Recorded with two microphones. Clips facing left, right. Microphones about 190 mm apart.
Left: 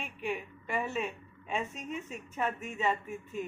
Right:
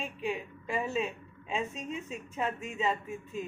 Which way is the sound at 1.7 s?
30° right (ahead or behind).